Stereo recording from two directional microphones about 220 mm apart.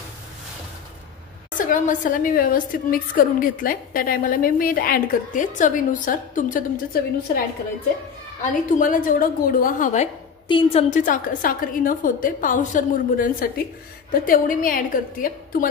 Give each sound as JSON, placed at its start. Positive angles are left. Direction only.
{"t": 1.5, "sound": "a woman's voice", "side_deg": 35}
{"t": 8.6, "sound": "a woman's voice", "side_deg": 35}
{"t": 10.5, "sound": "a woman's voice", "side_deg": 25}